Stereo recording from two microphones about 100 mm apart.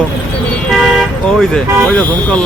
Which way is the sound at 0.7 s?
Centre (ahead or behind).